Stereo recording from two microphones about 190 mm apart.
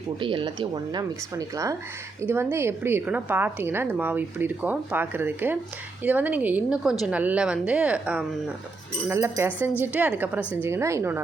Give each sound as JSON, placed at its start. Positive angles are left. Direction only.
{"t": 0.2, "sound": "a woman's voice", "side_deg": -25}